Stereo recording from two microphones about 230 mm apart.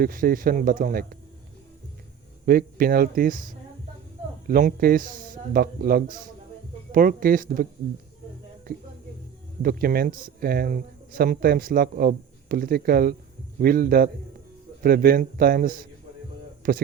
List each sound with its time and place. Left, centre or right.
0.0 s speech: right
2.5 s speech: right
9.6 s speech: right